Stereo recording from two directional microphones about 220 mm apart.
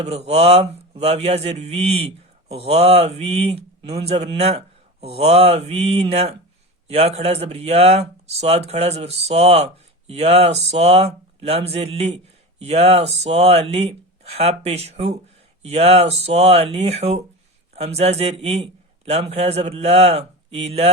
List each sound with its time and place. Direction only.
0.0 s mantra: 30° right (ahead or behind)